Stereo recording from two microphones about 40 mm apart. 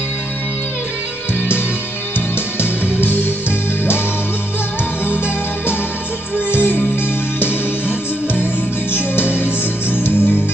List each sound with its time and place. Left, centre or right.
3.0 s music: left
5.0 s music: left
8.9 s music: left